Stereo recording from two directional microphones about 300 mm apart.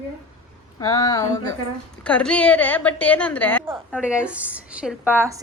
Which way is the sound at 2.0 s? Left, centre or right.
Centre.